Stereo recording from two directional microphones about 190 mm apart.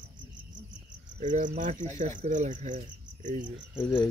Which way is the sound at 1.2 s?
40° right (ahead or behind).